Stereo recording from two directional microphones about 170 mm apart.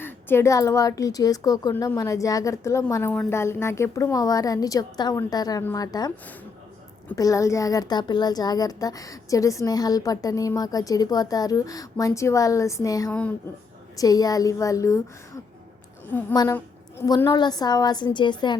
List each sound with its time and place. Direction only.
0.0 s a child's voice: 15° left (ahead or behind)
7.2 s a child's voice: 20° left (ahead or behind)
13.1 s speech: 10° left (ahead or behind)
13.9 s a child's voice: 20° left (ahead or behind)
16.3 s a child's voice: 25° left (ahead or behind)